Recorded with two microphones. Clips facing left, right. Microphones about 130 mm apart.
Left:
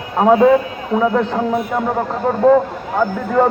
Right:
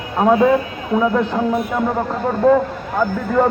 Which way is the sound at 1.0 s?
15° left (ahead or behind).